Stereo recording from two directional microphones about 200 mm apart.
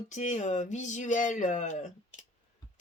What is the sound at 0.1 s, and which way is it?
A woman's voice, 35° left (ahead or behind).